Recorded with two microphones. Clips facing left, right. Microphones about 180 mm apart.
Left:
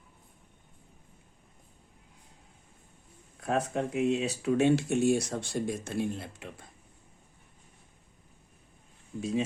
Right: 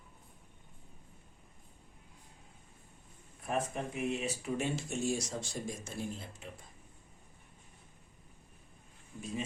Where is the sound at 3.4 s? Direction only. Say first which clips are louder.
Left 6 dB; 80° left.